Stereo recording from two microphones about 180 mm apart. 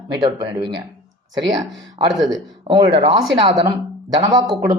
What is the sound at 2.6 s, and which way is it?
Speech, 25° right (ahead or behind).